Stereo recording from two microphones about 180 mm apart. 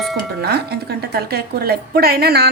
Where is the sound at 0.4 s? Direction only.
60° right (ahead or behind).